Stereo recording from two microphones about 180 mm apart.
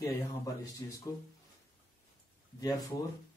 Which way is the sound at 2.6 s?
20° left (ahead or behind).